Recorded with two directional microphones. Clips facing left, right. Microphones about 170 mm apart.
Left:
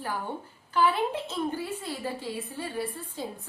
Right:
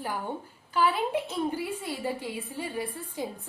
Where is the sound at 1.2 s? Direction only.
15° right (ahead or behind).